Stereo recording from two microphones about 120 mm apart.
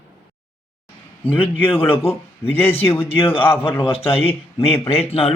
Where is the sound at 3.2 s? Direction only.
50° left (ahead or behind).